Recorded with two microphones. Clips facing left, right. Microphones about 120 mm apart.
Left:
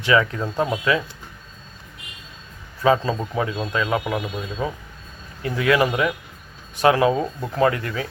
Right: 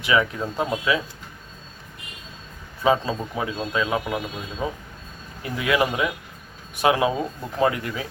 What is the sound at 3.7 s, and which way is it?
Speech, 15° right (ahead or behind).